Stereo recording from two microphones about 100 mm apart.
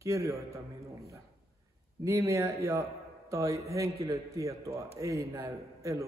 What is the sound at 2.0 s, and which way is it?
A man's voice, 30° right (ahead or behind).